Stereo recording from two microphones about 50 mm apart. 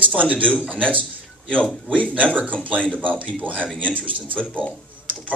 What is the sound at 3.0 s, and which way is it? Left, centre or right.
Speech, left.